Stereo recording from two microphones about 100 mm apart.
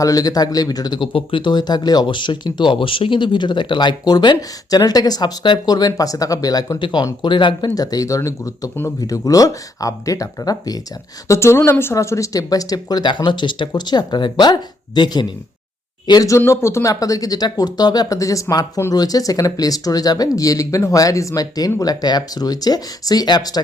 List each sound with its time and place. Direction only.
0.0 s speech: 35° left (ahead or behind)
11.3 s speech: 25° left (ahead or behind)
16.4 s speech: 25° left (ahead or behind)